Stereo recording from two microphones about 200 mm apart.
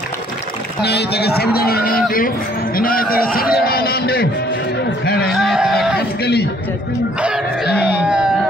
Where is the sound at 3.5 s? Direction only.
50° left (ahead or behind).